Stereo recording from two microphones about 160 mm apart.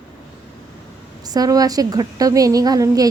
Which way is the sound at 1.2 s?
25° right (ahead or behind).